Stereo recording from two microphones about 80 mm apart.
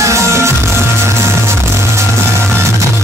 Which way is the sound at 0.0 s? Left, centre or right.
Right.